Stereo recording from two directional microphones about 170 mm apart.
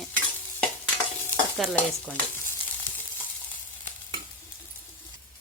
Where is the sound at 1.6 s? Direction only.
Centre (ahead or behind).